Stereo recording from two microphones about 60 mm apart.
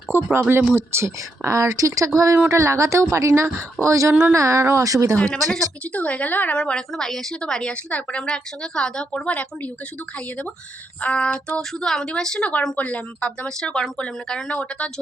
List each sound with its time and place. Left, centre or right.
0.1 s a sound: right
0.8 s speech: right
2.1 s speech: right
4.1 s speech: right
4.4 s speech: right
4.8 s speech: right
5.2 s a woman's voice: centre
5.9 s a woman's voice: left
11.0 s a woman's voice: centre
14.5 s a woman's voice: left